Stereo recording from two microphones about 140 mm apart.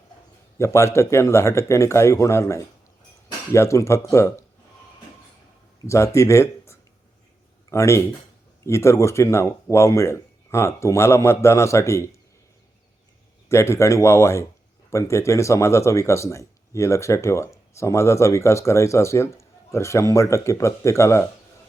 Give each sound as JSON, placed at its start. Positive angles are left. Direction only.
{"t": 0.6, "sound": "speech", "side_deg": 20}
{"t": 5.8, "sound": "speech", "side_deg": 20}
{"t": 13.5, "sound": "speech", "side_deg": 20}